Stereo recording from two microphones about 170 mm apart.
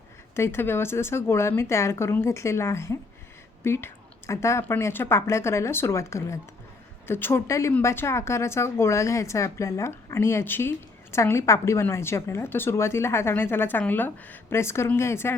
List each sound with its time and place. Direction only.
0.3 s speech: 15° left (ahead or behind)